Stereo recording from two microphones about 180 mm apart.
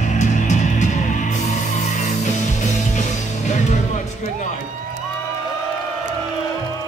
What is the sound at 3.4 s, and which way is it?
Music, 40° left (ahead or behind).